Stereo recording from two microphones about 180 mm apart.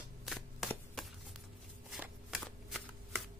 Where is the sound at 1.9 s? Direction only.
5° right (ahead or behind).